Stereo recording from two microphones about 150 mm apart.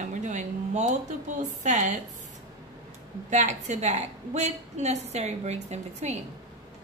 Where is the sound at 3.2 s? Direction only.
50° right (ahead or behind).